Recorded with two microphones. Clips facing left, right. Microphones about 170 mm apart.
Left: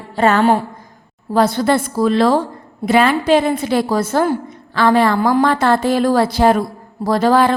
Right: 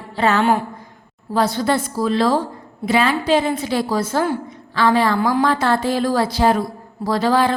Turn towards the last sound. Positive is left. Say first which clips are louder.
# left 4 dB
turn(degrees=50)  # may be behind; listen again after turning